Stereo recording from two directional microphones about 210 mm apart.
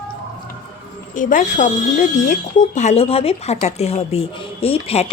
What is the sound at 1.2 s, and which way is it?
Speech, 40° left (ahead or behind).